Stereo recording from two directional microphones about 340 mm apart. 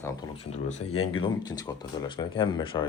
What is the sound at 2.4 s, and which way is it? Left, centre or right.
Speech, centre.